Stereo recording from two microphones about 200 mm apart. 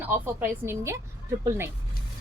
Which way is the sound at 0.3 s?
10° right (ahead or behind).